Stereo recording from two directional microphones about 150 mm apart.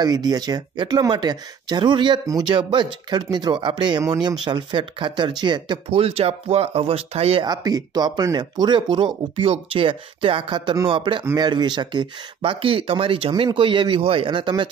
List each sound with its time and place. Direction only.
0.0 s speech: 25° right (ahead or behind); by 7.4 s 40° right (ahead or behind)
7.4 s speech: 25° right (ahead or behind)